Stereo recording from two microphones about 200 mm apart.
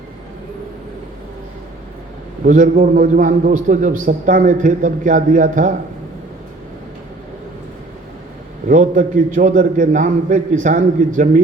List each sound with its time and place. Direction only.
2.4 s a man's voice: 40° right (ahead or behind)
8.7 s a man's voice: 40° right (ahead or behind)